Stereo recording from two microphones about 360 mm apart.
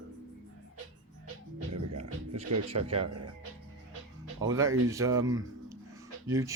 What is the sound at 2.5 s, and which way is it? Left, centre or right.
Speech, right.